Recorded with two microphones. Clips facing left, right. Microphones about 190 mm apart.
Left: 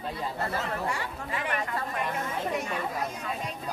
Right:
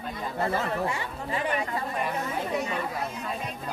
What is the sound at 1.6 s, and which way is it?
Speech, 10° right (ahead or behind).